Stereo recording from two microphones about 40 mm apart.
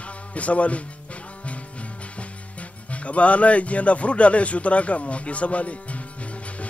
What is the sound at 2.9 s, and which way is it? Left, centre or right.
Speech, left.